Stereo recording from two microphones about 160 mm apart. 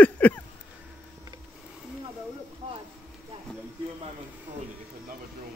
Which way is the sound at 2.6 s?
40° right (ahead or behind).